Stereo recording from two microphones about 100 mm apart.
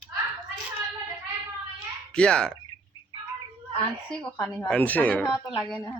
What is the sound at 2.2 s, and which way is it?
Speech, 10° left (ahead or behind).